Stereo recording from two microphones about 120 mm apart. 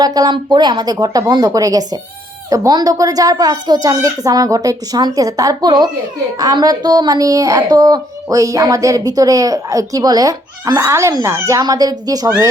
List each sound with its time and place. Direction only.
0.0 s a child's voice: 30° right (ahead or behind)